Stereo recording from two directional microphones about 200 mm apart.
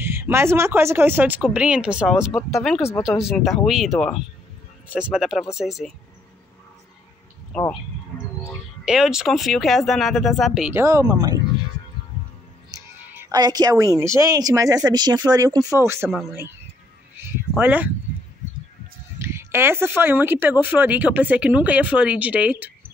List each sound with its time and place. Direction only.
0.0 s speech: 10° right (ahead or behind)
7.5 s speech: 5° left (ahead or behind)
8.8 s speech: 5° right (ahead or behind)
12.7 s speech: 20° right (ahead or behind)
16.1 s speech: centre (ahead or behind)
17.6 s speech: 10° right (ahead or behind)
19.2 s speech: 10° right (ahead or behind)